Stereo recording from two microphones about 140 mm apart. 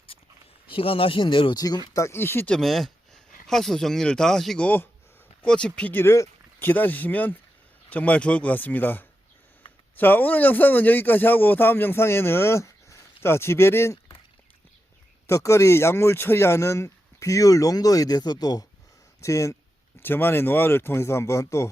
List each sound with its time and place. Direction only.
0.7 s speech: 40° left (ahead or behind); by 2.6 s 15° left (ahead or behind)
2.6 s speech: centre (ahead or behind); by 14.0 s 20° left (ahead or behind)
15.3 s a man's voice: 20° left (ahead or behind)